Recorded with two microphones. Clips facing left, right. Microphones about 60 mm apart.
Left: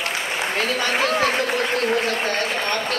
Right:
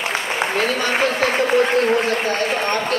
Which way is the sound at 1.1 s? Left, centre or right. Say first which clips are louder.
Right 3 dB; right.